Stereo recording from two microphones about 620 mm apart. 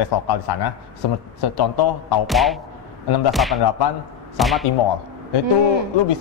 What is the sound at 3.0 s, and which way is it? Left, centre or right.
Speech, left.